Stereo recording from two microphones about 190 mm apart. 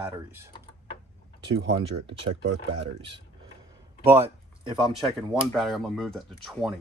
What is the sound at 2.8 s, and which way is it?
Speech, 30° right (ahead or behind).